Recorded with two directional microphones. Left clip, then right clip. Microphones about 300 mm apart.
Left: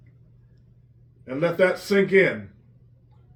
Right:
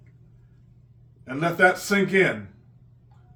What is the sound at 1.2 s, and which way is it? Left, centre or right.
Speech, centre.